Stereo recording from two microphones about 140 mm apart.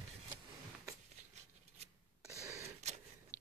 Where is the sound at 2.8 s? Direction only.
55° right (ahead or behind).